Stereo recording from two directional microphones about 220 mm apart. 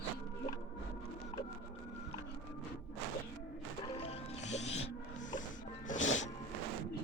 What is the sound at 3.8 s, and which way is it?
Music, 25° left (ahead or behind).